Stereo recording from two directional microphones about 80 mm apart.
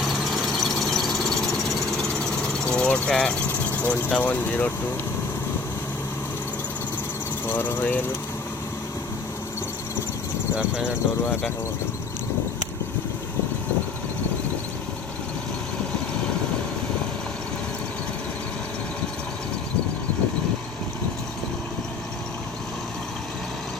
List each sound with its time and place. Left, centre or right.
0.0 s engine: centre
3.8 s speech: left
7.4 s speech: left
10.5 s speech: centre